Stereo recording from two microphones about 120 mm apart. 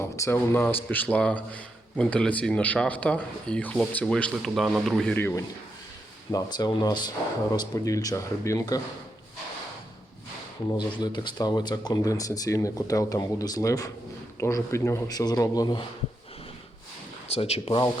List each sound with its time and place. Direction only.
0.0 s a man's voice: 20° left (ahead or behind); by 5.1 s 5° left (ahead or behind)
5.1 s speech: 15° left (ahead or behind)
6.3 s speech: 35° left (ahead or behind)
10.9 s speech: 40° left (ahead or behind)
17.2 s speech: 55° left (ahead or behind)